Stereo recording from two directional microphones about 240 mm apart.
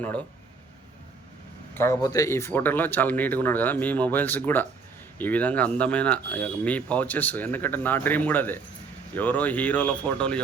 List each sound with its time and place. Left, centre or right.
0.0 s speech: centre
1.7 s speech: centre